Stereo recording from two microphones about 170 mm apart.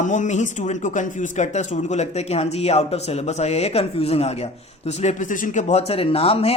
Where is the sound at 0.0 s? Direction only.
45° left (ahead or behind).